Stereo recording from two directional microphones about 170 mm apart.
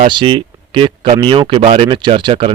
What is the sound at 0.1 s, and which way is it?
Speech, 30° right (ahead or behind).